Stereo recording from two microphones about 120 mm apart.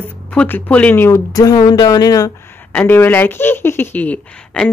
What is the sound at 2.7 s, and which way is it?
Speech, 15° left (ahead or behind).